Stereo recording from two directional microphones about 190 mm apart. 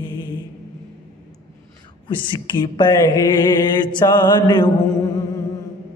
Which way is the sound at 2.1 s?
25° left (ahead or behind).